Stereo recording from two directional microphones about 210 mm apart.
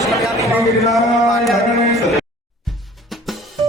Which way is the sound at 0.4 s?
Centre (ahead or behind).